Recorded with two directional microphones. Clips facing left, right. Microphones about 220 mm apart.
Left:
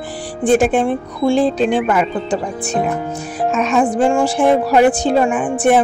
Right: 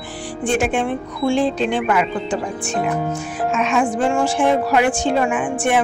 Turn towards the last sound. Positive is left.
turn(degrees=35)  # may be behind; listen again after turning